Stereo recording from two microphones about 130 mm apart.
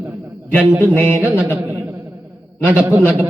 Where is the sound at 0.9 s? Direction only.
15° left (ahead or behind).